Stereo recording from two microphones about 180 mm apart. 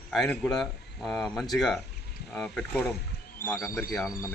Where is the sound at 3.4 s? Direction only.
15° left (ahead or behind).